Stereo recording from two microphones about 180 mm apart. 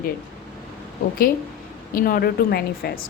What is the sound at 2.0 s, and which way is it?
A woman's voice, 50° left (ahead or behind).